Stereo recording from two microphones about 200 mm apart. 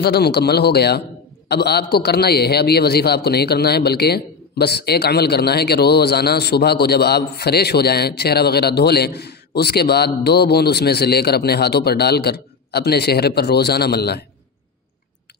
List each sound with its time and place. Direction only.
0.0 s a man's voice: 55° left (ahead or behind)